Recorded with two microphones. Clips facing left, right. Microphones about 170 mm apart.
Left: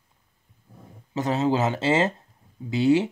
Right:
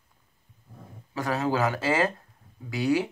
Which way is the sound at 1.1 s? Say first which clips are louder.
Left 4 dB; 20° left (ahead or behind).